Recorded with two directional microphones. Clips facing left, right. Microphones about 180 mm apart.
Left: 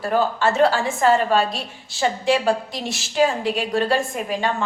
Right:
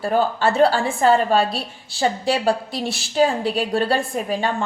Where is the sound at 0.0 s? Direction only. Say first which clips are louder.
Right 1 dB; 30° right (ahead or behind).